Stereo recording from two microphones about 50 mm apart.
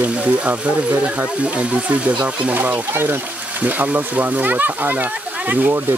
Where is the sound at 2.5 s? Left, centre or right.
Right.